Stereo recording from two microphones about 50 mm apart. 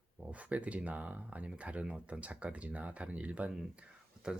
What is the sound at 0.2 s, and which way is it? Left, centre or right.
Speech, right.